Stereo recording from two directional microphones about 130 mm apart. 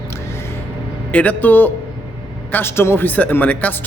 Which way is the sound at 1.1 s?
10° left (ahead or behind).